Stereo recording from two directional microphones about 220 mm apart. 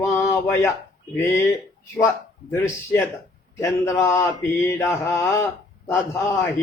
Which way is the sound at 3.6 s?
15° left (ahead or behind).